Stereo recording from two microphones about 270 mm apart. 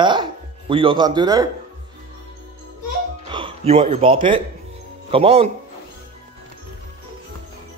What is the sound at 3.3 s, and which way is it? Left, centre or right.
Speech, right.